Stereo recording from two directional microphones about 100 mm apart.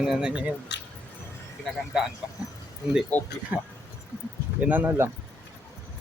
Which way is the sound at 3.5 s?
20° right (ahead or behind).